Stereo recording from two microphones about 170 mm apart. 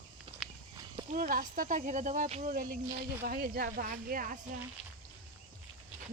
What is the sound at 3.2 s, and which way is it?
Speech, 60° right (ahead or behind).